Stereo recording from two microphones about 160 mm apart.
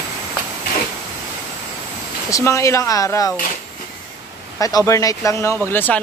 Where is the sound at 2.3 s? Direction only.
20° left (ahead or behind).